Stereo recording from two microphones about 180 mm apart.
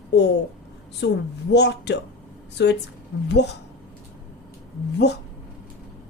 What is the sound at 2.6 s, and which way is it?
Speech, 85° left.